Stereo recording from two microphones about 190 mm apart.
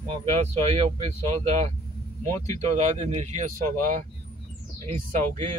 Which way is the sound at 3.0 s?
35° right (ahead or behind).